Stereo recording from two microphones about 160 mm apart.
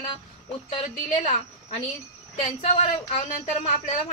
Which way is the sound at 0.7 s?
35° left (ahead or behind).